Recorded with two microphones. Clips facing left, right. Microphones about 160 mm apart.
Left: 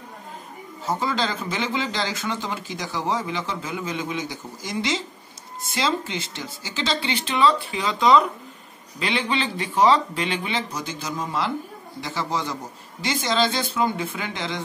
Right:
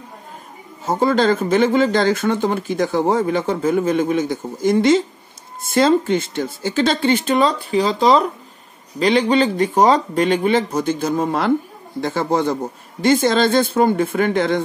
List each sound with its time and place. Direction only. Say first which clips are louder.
0.8 s speech: right 9 dB; 50° right (ahead or behind)